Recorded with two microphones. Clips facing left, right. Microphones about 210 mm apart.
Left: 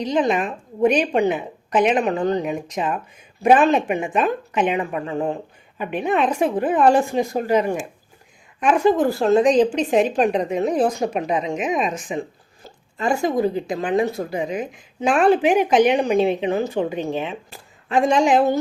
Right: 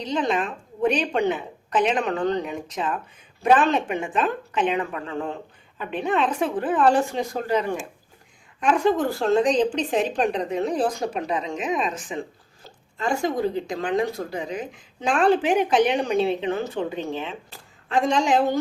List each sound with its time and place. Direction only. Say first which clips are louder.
0.0 s a woman's voice: left 4 dB; 10° left (ahead or behind)
13.4 s a woman's voice: left 3 dB; 5° left (ahead or behind)